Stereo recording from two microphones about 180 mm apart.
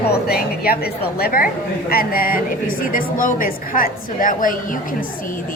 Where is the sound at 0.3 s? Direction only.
55° left (ahead or behind).